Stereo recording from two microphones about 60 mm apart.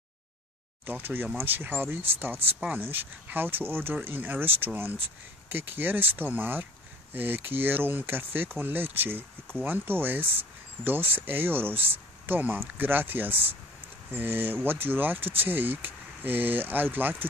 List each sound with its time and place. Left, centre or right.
0.8 s speech: right